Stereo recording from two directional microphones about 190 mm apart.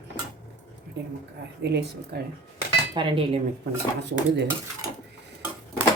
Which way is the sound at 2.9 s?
25° right (ahead or behind).